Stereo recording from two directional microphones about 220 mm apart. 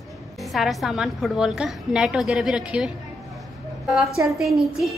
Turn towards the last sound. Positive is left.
turn(degrees=0)  # may be behind; listen again after turning